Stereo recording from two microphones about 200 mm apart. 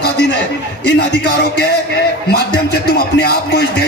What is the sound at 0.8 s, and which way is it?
A man's voice, 55° left (ahead or behind).